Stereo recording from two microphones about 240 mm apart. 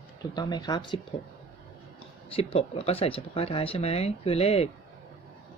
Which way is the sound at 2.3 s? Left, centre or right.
Left.